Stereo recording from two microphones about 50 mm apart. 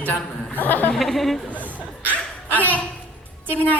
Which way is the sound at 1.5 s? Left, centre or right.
Left.